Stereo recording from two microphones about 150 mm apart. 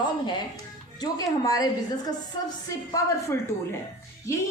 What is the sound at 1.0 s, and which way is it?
A woman's voice, 25° left (ahead or behind).